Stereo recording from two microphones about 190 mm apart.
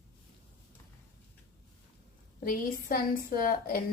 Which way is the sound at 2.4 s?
50° left (ahead or behind).